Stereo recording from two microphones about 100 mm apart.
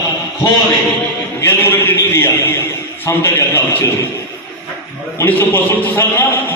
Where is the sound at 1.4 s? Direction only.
20° left (ahead or behind).